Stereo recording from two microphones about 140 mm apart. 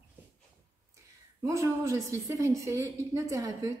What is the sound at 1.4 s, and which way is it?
A woman's voice, 20° right (ahead or behind).